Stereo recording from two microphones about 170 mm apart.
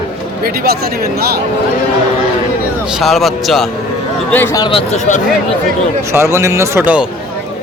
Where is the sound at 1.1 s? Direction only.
65° right (ahead or behind).